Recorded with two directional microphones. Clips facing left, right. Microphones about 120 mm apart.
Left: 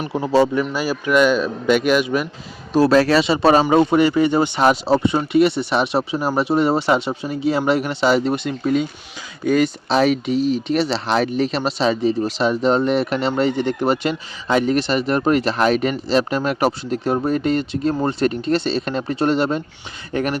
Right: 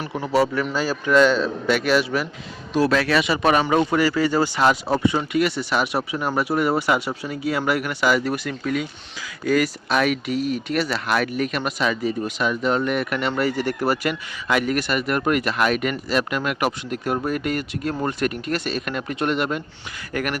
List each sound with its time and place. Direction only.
0.0 s speech: 20° left (ahead or behind)
0.6 s speech: 15° left (ahead or behind)
2.7 s speech: 35° left (ahead or behind)